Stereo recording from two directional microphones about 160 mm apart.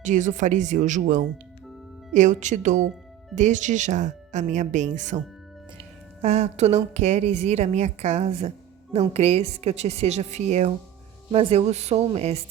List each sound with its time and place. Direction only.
0.0 s a woman's voice: 50° right (ahead or behind)
6.2 s a woman's voice: 40° right (ahead or behind)